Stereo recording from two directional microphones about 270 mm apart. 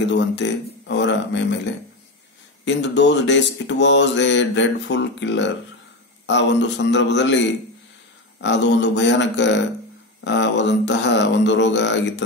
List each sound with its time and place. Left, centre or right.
0.0 s mantra: left
2.6 s mantra: left